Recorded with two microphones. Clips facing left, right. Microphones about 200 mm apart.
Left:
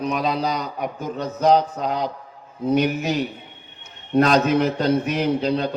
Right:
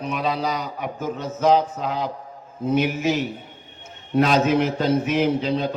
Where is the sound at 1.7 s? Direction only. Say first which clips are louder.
Left 2 dB; 40° left (ahead or behind).